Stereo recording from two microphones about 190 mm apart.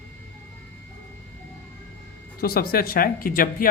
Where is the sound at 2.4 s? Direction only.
50° left (ahead or behind).